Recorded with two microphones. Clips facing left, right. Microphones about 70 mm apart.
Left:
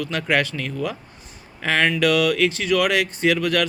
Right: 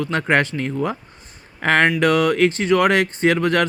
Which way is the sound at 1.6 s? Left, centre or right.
Right.